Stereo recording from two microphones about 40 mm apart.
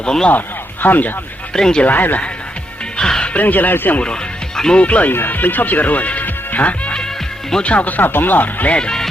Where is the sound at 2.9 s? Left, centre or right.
Centre.